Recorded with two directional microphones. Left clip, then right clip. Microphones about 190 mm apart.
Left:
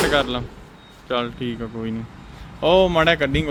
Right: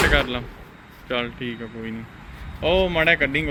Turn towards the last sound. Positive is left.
turn(degrees=20)  # may be behind; listen again after turning